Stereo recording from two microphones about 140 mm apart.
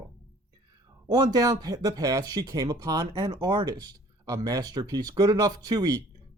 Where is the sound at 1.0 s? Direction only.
25° right (ahead or behind).